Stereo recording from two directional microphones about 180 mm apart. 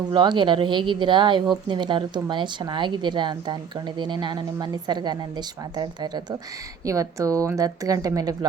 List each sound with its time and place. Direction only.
0.1 s speech: 25° right (ahead or behind)